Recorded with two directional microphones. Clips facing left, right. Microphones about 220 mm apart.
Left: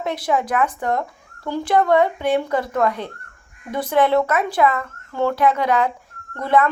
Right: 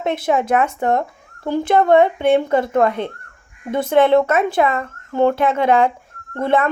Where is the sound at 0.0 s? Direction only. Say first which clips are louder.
Right 3 dB; 25° right (ahead or behind).